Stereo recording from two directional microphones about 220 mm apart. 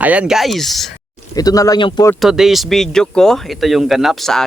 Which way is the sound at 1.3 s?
15° left (ahead or behind).